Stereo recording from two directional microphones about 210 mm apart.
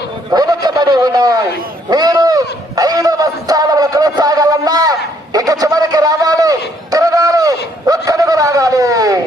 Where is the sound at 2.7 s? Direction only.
15° right (ahead or behind).